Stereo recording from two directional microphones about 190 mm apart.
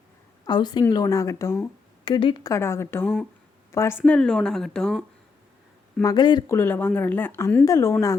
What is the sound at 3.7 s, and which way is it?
Speech, 15° left (ahead or behind).